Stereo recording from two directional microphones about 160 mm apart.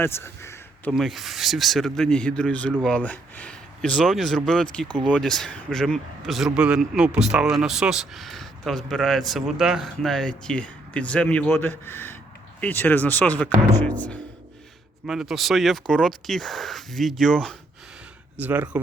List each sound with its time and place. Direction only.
0.0 s speech: 15° left (ahead or behind)
0.9 s speech: centre (ahead or behind)
15.0 s speech: 5° right (ahead or behind)
18.3 s speech: 10° right (ahead or behind)